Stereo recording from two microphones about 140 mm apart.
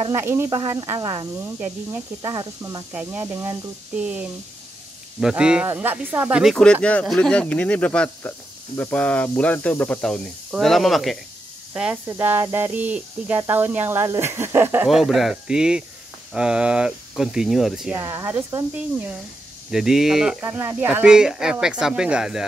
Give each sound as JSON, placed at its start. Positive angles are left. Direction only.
{"t": 0.1, "sound": "speech", "side_deg": -20}
{"t": 0.9, "sound": "speech", "side_deg": -30}
{"t": 1.4, "sound": "speech", "side_deg": -15}
{"t": 2.2, "sound": "speech", "side_deg": -30}
{"t": 2.9, "sound": "speech", "side_deg": -10}
{"t": 3.3, "sound": "speech", "side_deg": -25}
{"t": 3.9, "sound": "speech", "side_deg": -10}
{"t": 6.5, "sound": "speech", "side_deg": 5}
{"t": 12.7, "sound": "speech", "side_deg": -10}
{"t": 14.9, "sound": "speech", "side_deg": 0}
{"t": 17.9, "sound": "speech", "side_deg": -20}
{"t": 19.7, "sound": "speech", "side_deg": -5}
{"t": 20.4, "sound": "speech", "side_deg": -15}